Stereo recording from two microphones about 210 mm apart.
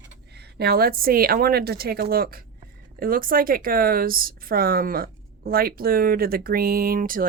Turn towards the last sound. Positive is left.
turn(degrees=-40)  # may be behind; listen again after turning